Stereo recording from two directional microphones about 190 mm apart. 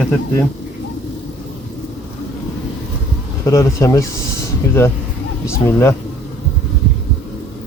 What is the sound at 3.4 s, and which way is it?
Speech, 15° left (ahead or behind).